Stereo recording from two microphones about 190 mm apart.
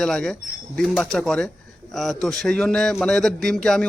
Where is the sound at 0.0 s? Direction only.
5° left (ahead or behind).